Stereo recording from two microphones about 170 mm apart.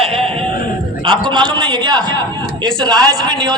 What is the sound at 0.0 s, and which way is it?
Music, 35° right (ahead or behind).